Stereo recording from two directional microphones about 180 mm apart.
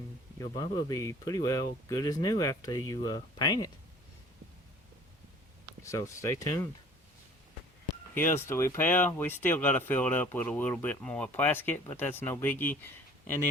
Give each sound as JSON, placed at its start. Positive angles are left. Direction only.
{"t": 0.3, "sound": "speech", "side_deg": 25}
{"t": 5.8, "sound": "speech", "side_deg": 15}
{"t": 8.1, "sound": "speech", "side_deg": 10}